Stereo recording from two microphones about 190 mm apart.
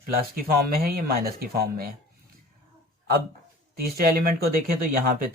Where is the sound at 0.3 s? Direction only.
50° right (ahead or behind).